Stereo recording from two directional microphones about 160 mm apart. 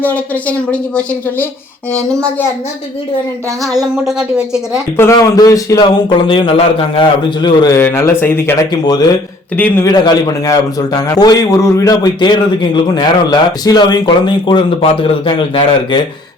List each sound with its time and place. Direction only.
0.0 s speech: 10° left (ahead or behind)
3.6 s a woman's voice: centre (ahead or behind)
4.9 s a man's voice: 20° left (ahead or behind)
7.8 s speech: 15° left (ahead or behind)
8.7 s a man's voice: 25° left (ahead or behind)
9.6 s speech: 10° left (ahead or behind)
9.8 s a man's voice: 25° left (ahead or behind)